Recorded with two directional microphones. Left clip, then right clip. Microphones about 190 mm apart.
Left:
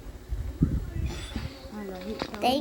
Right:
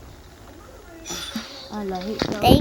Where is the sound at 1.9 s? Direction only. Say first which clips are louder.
Right 9 dB; 40° right (ahead or behind).